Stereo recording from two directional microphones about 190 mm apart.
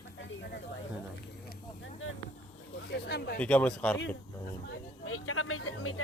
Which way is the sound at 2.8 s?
60° left (ahead or behind).